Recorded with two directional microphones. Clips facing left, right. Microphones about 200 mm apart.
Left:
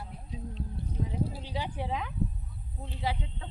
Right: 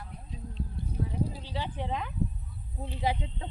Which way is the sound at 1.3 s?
15° left (ahead or behind).